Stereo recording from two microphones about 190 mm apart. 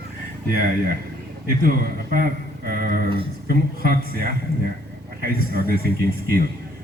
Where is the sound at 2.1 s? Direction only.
50° right (ahead or behind).